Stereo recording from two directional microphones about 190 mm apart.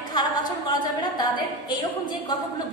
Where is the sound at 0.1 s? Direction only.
20° left (ahead or behind).